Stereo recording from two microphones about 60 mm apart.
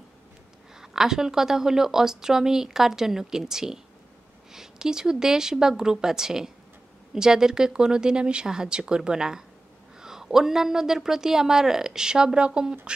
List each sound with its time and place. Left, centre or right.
0.7 s a woman's voice: centre